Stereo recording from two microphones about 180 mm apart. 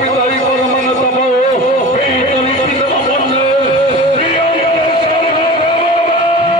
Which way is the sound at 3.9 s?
35° left (ahead or behind).